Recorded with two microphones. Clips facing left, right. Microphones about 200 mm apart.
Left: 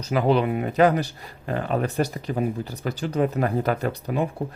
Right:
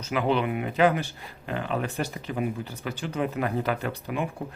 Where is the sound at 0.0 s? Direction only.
40° left (ahead or behind).